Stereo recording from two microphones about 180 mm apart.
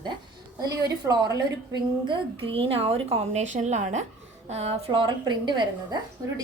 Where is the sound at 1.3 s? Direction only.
25° right (ahead or behind).